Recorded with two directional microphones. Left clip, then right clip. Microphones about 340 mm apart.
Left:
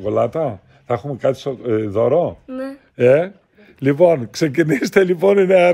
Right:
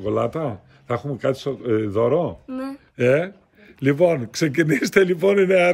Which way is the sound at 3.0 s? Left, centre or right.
Centre.